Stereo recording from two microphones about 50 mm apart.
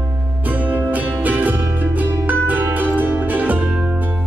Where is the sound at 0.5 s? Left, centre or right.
Right.